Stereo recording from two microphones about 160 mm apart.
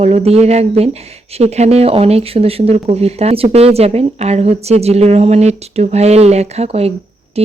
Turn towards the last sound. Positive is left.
turn(degrees=-40)  # may be behind; listen again after turning